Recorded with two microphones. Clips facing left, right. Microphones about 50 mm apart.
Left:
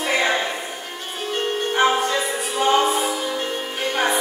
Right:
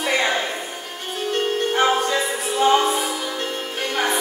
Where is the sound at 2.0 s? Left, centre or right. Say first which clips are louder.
Right 1 dB; centre.